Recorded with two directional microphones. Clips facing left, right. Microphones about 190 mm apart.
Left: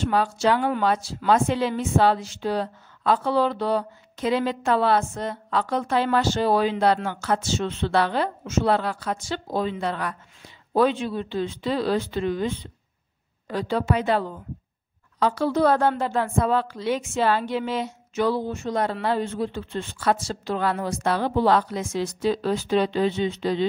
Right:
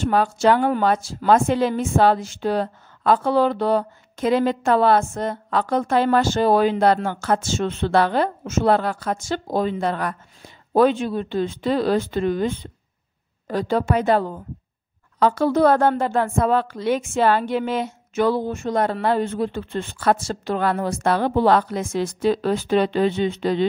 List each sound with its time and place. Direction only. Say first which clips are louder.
0.0 s a woman's voice: right 4 dB; 50° right (ahead or behind)